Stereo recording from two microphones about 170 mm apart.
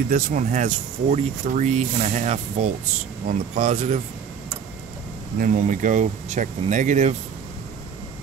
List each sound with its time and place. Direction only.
0.1 s speech: 50° right (ahead or behind)
5.4 s speech: 50° right (ahead or behind)